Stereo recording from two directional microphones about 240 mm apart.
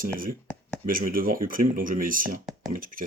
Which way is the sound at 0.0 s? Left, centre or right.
Right.